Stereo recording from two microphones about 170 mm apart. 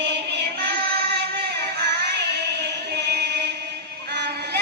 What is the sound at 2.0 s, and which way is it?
Music, 75° right (ahead or behind).